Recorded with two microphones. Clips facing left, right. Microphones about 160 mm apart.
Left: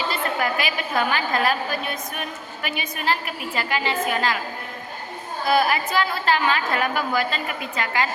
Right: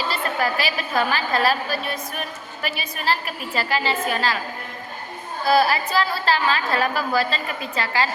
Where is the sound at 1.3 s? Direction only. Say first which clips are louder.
Right 1 dB; 20° left (ahead or behind).